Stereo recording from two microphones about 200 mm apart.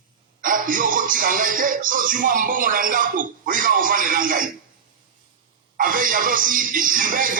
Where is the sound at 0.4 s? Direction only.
45° right (ahead or behind).